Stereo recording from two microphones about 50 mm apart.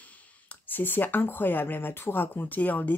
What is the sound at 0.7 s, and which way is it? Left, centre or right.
Speech, left.